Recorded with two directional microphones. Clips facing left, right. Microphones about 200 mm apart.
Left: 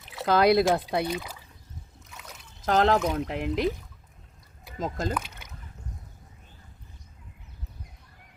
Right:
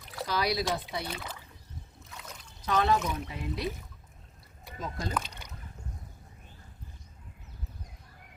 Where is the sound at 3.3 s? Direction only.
90° left.